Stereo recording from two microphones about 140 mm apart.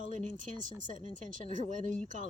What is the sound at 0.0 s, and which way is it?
Speech, 65° right (ahead or behind).